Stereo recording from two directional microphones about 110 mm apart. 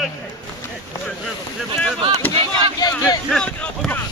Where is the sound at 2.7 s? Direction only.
35° left (ahead or behind).